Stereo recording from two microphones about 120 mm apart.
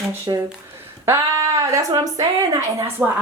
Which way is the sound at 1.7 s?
30° right (ahead or behind).